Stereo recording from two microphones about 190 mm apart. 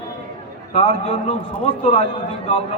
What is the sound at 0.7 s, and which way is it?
A man's voice, 30° left (ahead or behind).